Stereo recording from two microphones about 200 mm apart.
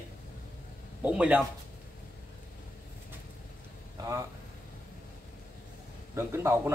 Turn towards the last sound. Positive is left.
turn(degrees=-15)  # may be behind; listen again after turning